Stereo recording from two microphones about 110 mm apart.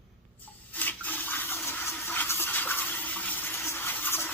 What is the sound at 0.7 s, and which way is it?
Toothbrush, 15° left (ahead or behind).